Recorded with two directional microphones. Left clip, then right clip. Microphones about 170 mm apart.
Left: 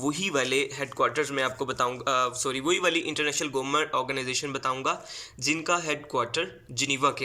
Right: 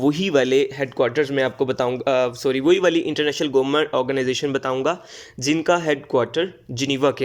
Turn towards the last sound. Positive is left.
turn(degrees=-40)  # may be behind; listen again after turning